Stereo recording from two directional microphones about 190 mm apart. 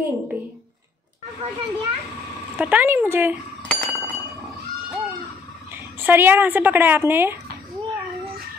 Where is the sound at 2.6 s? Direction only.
10° right (ahead or behind).